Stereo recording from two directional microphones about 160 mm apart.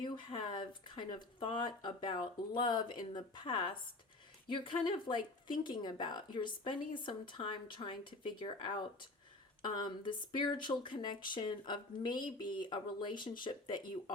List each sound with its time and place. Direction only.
0.0 s speech: 30° left (ahead or behind)